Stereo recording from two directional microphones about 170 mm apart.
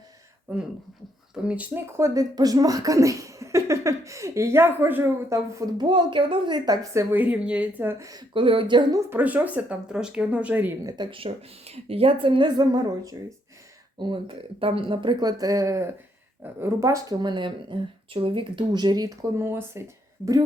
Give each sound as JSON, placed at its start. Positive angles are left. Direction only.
{"t": 0.5, "sound": "speech", "side_deg": -10}
{"t": 8.3, "sound": "speech", "side_deg": -30}
{"t": 9.0, "sound": "speech", "side_deg": -10}
{"t": 10.9, "sound": "speech", "side_deg": -30}